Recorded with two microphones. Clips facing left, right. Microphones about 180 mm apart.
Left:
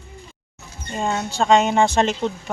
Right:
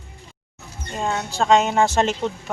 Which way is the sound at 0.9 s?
Centre (ahead or behind).